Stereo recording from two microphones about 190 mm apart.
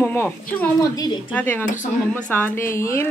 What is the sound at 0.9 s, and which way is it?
Speech, 20° left (ahead or behind).